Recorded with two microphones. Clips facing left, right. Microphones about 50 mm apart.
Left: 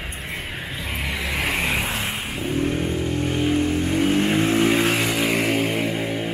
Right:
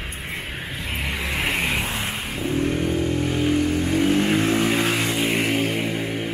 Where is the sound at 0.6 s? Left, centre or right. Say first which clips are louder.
Even; centre.